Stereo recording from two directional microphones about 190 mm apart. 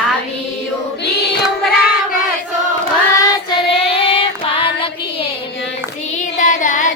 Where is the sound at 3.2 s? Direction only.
25° left (ahead or behind).